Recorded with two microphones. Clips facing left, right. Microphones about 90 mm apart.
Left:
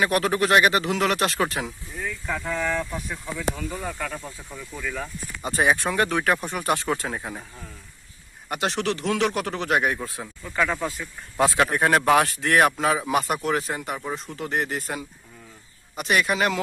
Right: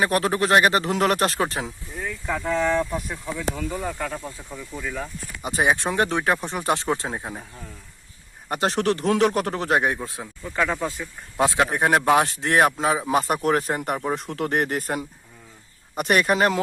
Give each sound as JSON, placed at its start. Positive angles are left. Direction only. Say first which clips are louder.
{"t": 0.0, "sound": "speech", "louder": "even", "side_deg": -30}
{"t": 2.2, "sound": "speech", "louder": "right 4 dB", "side_deg": -15}
{"t": 2.5, "sound": "speech", "louder": "right 5 dB", "side_deg": -25}
{"t": 3.3, "sound": "speech", "louder": "right 1 dB", "side_deg": -5}
{"t": 8.4, "sound": "speech", "louder": "right 3 dB", "side_deg": -35}